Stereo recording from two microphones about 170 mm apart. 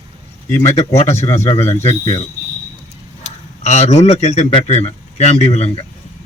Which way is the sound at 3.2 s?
40° left (ahead or behind).